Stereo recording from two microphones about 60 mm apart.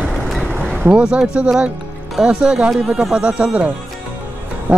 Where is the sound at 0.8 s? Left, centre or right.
Centre.